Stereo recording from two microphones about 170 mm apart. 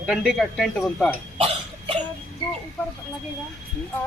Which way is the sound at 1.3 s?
35° right (ahead or behind).